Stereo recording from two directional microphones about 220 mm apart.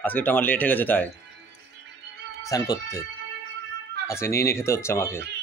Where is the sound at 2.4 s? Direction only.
15° left (ahead or behind).